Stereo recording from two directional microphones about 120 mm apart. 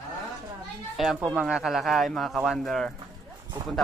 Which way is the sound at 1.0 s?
Centre (ahead or behind).